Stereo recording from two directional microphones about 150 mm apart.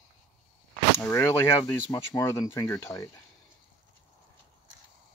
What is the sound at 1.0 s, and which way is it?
Speech, 15° left (ahead or behind).